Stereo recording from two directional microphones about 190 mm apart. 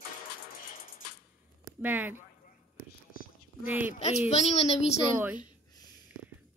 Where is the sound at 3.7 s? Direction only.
10° right (ahead or behind).